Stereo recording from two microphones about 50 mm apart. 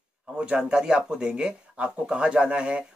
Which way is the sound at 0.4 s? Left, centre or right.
Centre.